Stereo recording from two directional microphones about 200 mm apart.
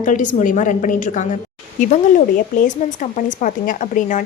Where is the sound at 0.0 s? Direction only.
40° left (ahead or behind).